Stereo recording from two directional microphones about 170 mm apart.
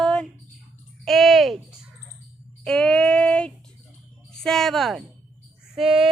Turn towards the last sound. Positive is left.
turn(degrees=-5)  # may be behind; listen again after turning